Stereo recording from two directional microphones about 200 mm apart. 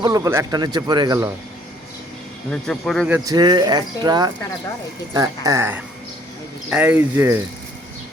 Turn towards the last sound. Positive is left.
turn(degrees=-10)  # may be behind; listen again after turning